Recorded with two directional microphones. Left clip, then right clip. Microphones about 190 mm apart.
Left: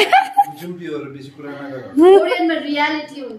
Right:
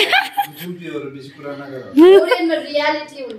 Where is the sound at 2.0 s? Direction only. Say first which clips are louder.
Right 1 dB; 15° right (ahead or behind).